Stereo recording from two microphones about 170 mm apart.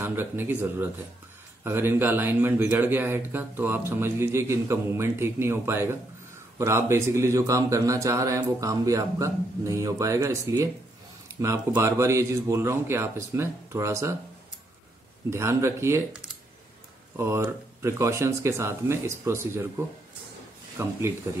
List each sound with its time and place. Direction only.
0.0 s speech: 15° right (ahead or behind)
15.2 s speech: 15° right (ahead or behind)
17.2 s speech: 15° right (ahead or behind)
20.8 s speech: 15° right (ahead or behind)